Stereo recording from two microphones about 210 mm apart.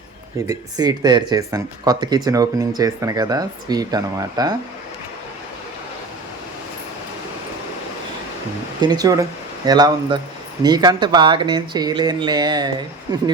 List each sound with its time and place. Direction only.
0.4 s speech: 20° right (ahead or behind)
8.8 s speech: 20° right (ahead or behind)